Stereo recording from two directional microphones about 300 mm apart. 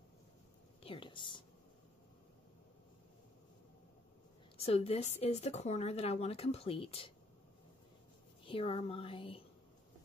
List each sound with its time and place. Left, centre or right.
0.8 s speech: centre
4.6 s speech: left
8.5 s speech: centre